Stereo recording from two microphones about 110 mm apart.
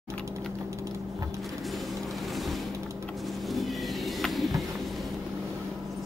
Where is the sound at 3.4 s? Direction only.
Centre (ahead or behind).